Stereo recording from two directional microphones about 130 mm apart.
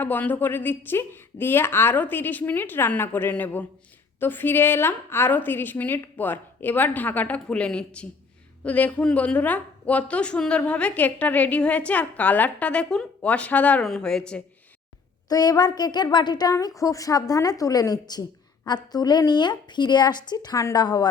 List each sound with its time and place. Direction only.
0.0 s a woman's voice: 15° left (ahead or behind)
15.3 s a woman's voice: 30° left (ahead or behind)